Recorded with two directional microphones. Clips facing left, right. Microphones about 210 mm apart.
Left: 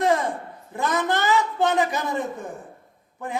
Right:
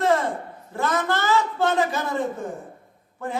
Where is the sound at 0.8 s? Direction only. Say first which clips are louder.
Even; 15° left (ahead or behind).